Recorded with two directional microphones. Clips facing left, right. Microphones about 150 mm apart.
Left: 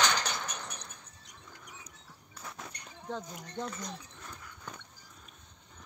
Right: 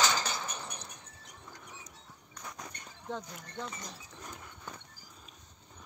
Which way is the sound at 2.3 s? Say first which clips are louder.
Even; centre (ahead or behind).